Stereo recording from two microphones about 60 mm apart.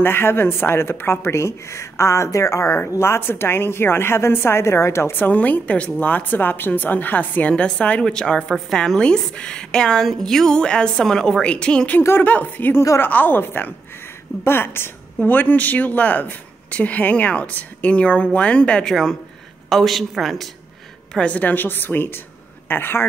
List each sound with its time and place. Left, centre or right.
0.0 s speech: left
3.0 s speech: left
5.1 s a woman's voice: left
12.2 s a woman's voice: left
15.1 s speech: left
18.9 s a woman's voice: centre
21.1 s a woman's voice: centre; by 23.0 s left